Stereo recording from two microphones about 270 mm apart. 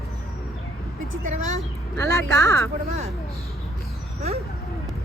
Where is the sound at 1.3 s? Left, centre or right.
Right.